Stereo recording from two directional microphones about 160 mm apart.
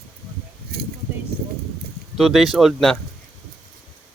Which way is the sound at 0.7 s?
75° right (ahead or behind).